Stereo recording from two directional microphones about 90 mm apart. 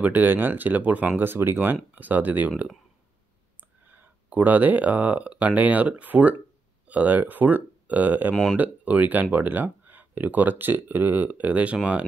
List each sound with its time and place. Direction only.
0.0 s speech: 20° right (ahead or behind)
3.8 s speech: 20° right (ahead or behind)